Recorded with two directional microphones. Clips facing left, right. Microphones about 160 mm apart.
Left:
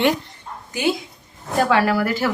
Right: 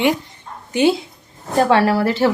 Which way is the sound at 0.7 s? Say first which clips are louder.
Right 6 dB; 25° right (ahead or behind).